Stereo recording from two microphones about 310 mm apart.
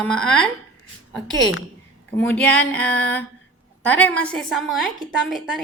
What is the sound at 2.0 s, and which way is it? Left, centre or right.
A woman's voice, centre.